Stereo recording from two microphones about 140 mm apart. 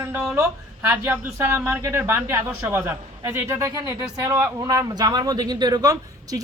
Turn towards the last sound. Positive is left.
turn(degrees=-25)  # may be behind; listen again after turning